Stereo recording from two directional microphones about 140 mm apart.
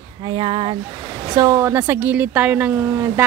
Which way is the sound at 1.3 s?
25° right (ahead or behind).